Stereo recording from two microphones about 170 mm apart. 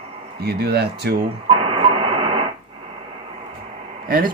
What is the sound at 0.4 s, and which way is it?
Speech, 70° right (ahead or behind).